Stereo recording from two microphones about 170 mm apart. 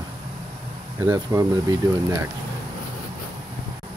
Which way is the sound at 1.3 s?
15° right (ahead or behind).